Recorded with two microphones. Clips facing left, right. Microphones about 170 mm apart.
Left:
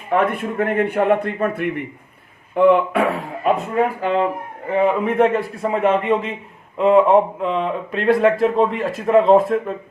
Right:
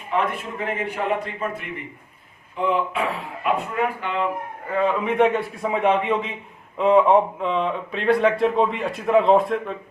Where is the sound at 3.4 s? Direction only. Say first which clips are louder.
Left 5 dB; 40° left (ahead or behind).